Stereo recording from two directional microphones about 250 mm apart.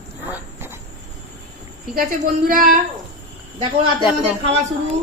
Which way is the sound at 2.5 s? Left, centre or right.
Right.